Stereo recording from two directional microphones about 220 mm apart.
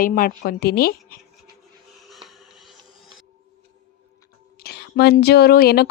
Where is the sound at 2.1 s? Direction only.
Centre (ahead or behind).